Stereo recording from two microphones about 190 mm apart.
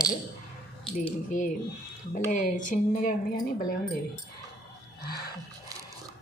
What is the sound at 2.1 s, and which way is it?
Speech, 45° left (ahead or behind).